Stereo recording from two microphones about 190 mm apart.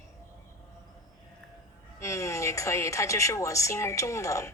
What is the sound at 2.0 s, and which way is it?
Speech, 15° left (ahead or behind).